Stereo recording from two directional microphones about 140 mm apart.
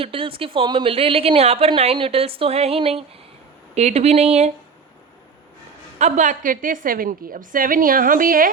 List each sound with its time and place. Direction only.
0.0 s a woman's voice: 40° right (ahead or behind)
6.0 s a woman's voice: 55° right (ahead or behind); by 8.4 s 85° right